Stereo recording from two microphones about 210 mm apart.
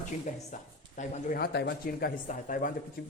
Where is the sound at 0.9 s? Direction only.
40° left (ahead or behind).